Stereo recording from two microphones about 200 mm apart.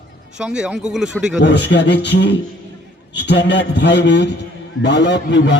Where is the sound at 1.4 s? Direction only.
60° left (ahead or behind).